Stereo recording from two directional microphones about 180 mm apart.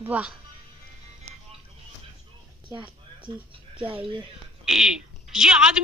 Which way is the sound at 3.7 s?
30° right (ahead or behind).